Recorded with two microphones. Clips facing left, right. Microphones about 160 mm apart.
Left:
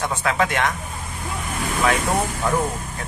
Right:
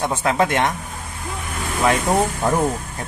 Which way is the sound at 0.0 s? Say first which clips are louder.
Right 3 dB; 25° right (ahead or behind).